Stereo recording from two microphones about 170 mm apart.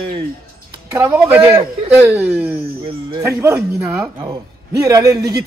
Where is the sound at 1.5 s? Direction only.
35° right (ahead or behind).